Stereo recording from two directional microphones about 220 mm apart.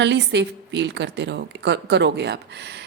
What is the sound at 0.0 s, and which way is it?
A woman's voice, 55° right (ahead or behind).